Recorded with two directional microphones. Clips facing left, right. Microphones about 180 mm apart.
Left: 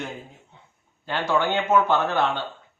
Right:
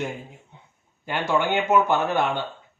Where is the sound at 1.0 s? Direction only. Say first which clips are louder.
Even; 15° right (ahead or behind).